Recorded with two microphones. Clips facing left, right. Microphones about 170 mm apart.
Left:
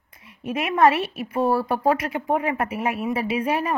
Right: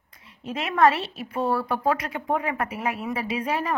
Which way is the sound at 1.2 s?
25° left (ahead or behind).